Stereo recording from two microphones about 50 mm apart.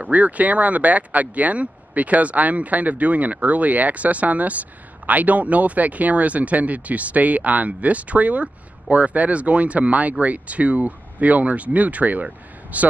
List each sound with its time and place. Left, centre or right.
0.0 s speech: right